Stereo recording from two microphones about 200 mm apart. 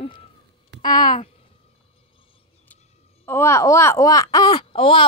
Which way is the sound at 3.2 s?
15° left (ahead or behind).